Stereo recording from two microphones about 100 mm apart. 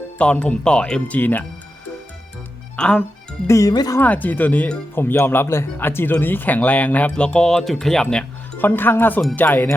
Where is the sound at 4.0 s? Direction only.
15° left (ahead or behind).